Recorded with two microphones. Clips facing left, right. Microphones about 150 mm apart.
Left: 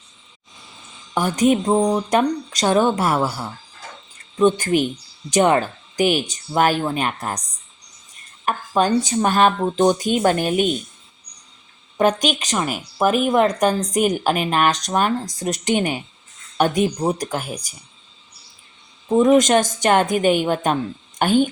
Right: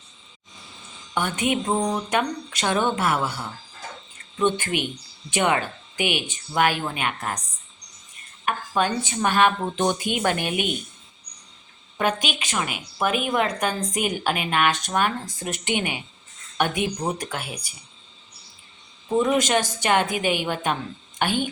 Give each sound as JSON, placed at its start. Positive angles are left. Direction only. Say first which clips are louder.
{"t": 1.1, "sound": "speech", "louder": "left 7 dB", "side_deg": 40}
{"t": 8.4, "sound": "speech", "louder": "left 5 dB", "side_deg": 40}
{"t": 11.9, "sound": "speech", "louder": "left 7 dB", "side_deg": 40}
{"t": 19.0, "sound": "a woman's voice", "louder": "left 7 dB", "side_deg": 45}